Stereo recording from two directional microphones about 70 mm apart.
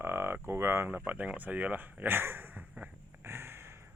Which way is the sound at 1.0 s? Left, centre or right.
Right.